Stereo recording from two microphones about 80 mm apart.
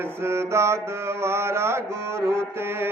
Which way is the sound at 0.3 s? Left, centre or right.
Right.